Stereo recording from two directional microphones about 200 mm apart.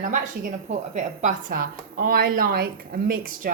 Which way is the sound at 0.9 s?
35° right (ahead or behind).